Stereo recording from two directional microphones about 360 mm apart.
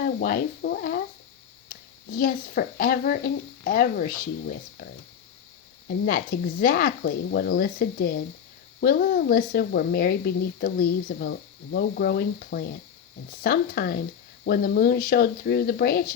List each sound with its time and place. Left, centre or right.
0.0 s a woman's voice: left
6.1 s a woman's voice: left